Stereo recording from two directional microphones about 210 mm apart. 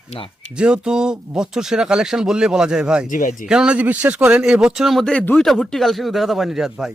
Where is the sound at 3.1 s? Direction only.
40° left (ahead or behind).